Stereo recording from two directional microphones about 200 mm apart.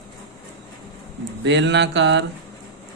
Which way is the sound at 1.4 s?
65° right (ahead or behind).